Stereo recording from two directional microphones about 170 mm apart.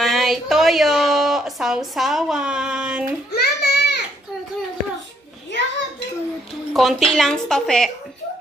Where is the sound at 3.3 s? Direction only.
70° left (ahead or behind).